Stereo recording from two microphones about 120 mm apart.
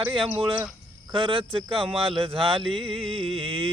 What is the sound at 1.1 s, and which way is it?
Speech, 45° right (ahead or behind).